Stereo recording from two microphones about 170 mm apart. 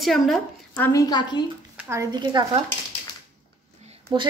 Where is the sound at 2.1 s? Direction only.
25° right (ahead or behind).